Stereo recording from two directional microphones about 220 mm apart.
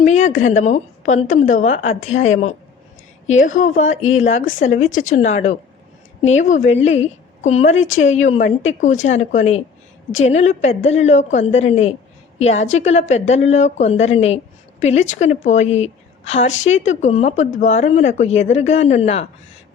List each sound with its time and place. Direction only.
0.0 s a woman's voice: 30° left (ahead or behind)
3.8 s speech: 65° left (ahead or behind)
4.2 s a woman's voice: 30° left (ahead or behind)